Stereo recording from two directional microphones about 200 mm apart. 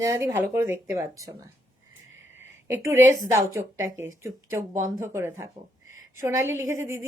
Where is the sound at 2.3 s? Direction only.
10° right (ahead or behind).